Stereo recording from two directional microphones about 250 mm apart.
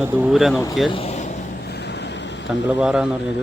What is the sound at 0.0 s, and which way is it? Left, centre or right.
Speech, centre.